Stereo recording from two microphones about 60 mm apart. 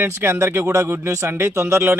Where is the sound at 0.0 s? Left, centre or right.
Right.